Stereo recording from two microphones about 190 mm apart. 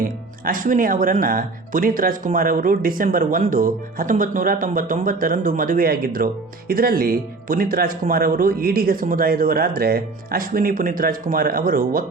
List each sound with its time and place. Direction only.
0.0 s speech: 45° right (ahead or behind)